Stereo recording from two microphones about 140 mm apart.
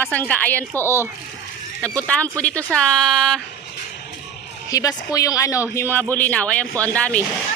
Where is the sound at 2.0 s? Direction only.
10° left (ahead or behind).